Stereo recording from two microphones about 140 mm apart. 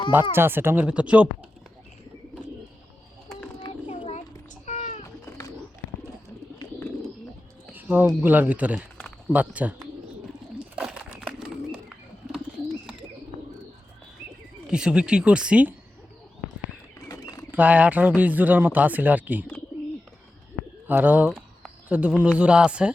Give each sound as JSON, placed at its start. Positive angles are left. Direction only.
{"t": 0.1, "sound": "speech", "side_deg": -15}
{"t": 4.6, "sound": "cat", "side_deg": 55}
{"t": 7.7, "sound": "speech", "side_deg": -10}
{"t": 10.8, "sound": "bird", "side_deg": -5}
{"t": 12.8, "sound": "bird", "side_deg": -5}
{"t": 14.7, "sound": "speech", "side_deg": -5}
{"t": 17.1, "sound": "bird", "side_deg": 25}
{"t": 17.5, "sound": "speech", "side_deg": -10}
{"t": 20.8, "sound": "speech", "side_deg": -10}